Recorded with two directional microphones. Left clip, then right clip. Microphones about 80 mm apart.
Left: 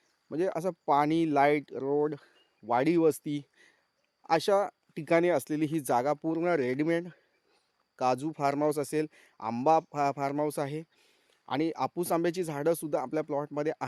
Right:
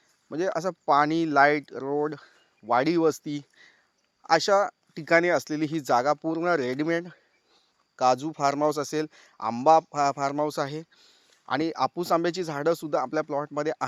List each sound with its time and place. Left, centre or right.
0.3 s speech: left
11.4 s speech: centre